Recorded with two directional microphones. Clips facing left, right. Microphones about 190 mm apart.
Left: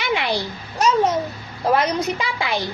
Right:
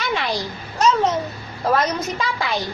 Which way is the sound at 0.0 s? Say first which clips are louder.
Left 1 dB; 15° left (ahead or behind).